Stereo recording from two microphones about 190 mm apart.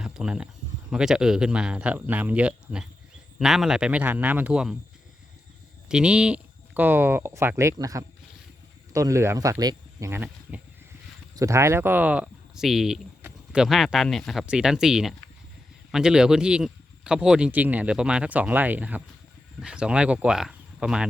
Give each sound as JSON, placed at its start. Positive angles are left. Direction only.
{"t": 0.0, "sound": "a sound", "side_deg": -5}
{"t": 0.9, "sound": "speech", "side_deg": -5}
{"t": 5.9, "sound": "speech", "side_deg": -5}